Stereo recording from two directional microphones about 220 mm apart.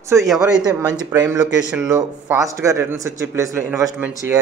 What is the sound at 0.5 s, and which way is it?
A man's voice, 15° right (ahead or behind).